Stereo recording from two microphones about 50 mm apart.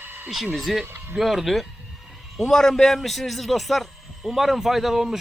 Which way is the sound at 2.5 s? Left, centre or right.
Centre.